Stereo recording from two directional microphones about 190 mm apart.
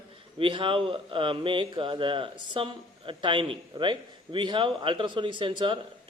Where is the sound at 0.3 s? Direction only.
25° right (ahead or behind).